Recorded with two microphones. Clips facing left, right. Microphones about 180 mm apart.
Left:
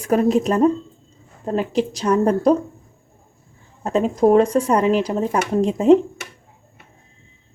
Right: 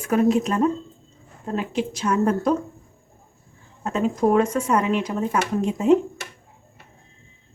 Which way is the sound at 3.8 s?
35° left (ahead or behind).